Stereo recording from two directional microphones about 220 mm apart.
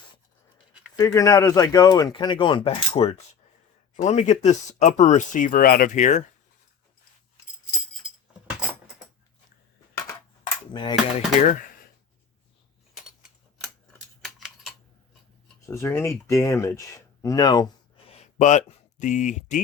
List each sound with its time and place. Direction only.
0.9 s speech: 15° left (ahead or behind); by 6.2 s 35° left (ahead or behind)
10.4 s a sound: 20° left (ahead or behind)
10.9 s speech: centre (ahead or behind)
14.3 s a sound: centre (ahead or behind)
15.6 s speech: 15° left (ahead or behind)
18.1 s speech: 30° left (ahead or behind)